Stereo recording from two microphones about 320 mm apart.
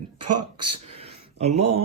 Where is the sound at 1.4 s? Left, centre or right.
Centre.